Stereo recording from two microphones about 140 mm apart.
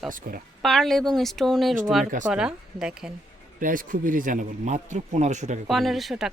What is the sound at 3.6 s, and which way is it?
Speech, 75° right (ahead or behind).